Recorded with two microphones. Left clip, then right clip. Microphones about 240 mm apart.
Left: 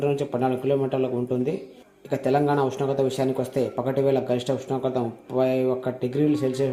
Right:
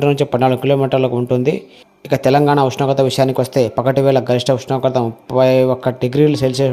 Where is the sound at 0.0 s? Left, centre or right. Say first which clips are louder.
Right 10 dB; right.